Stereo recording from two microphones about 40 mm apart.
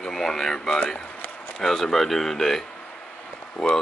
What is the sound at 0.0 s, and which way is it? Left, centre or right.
Speech, centre.